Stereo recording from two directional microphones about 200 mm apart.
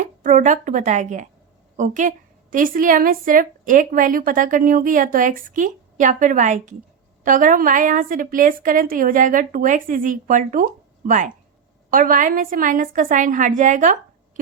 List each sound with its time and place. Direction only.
0.0 s a woman's voice: 40° right (ahead or behind)